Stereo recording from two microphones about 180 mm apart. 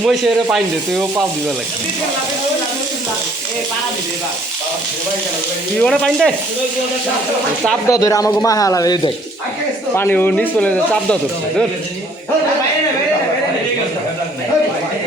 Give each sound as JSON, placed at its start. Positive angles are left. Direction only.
{"t": 0.0, "sound": "speech", "side_deg": 0}
{"t": 5.8, "sound": "speech", "side_deg": 5}
{"t": 7.9, "sound": "speech", "side_deg": 20}